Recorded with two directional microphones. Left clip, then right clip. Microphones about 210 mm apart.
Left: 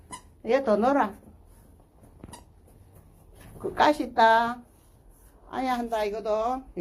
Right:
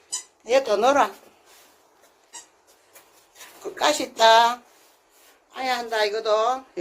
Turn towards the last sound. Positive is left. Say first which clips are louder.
# right 5 dB
turn(degrees=5)  # may be behind; listen again after turning